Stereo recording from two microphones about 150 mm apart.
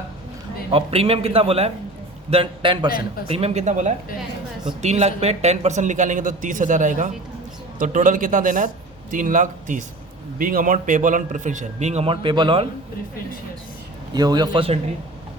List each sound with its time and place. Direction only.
0.7 s a man's voice: 40° right (ahead or behind)
14.1 s a man's voice: 25° right (ahead or behind)